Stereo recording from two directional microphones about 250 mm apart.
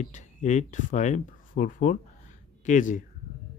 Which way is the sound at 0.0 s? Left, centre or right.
Left.